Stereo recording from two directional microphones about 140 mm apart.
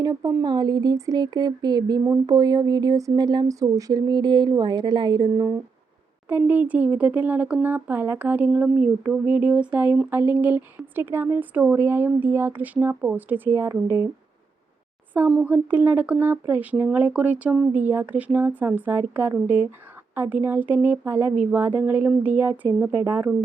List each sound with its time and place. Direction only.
0.0 s speech: 25° right (ahead or behind)
6.2 s speech: 10° right (ahead or behind)
15.3 s speech: 10° right (ahead or behind)